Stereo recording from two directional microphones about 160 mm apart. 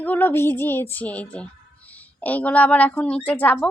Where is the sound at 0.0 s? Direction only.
10° left (ahead or behind).